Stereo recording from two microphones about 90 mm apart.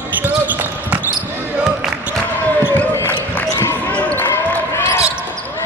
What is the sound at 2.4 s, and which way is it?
Basketball bounce, 25° left (ahead or behind).